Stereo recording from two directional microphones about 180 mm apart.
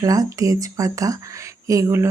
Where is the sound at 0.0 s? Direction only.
20° right (ahead or behind).